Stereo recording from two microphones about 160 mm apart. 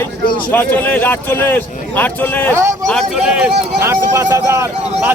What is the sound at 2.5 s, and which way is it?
Speech, 15° right (ahead or behind).